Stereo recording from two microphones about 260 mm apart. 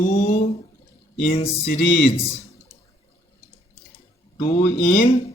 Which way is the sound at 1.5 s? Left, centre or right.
Left.